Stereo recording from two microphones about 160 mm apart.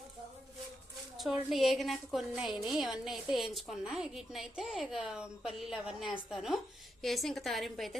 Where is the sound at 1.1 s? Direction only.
Centre (ahead or behind).